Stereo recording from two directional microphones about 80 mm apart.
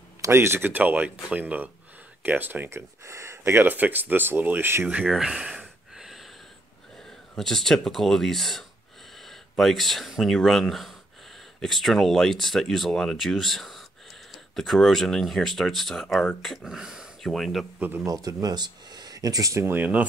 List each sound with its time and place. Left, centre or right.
0.2 s speech: right
3.0 s speech: right
3.6 s speech: right
5.0 s a sound: centre
7.0 s speech: centre
17.2 s speech: centre
17.7 s speech: right
18.0 s speech: right
19.7 s speech: centre